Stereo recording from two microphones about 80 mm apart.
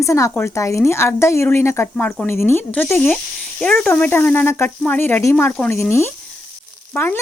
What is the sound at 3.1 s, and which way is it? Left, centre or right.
A child's voice, centre.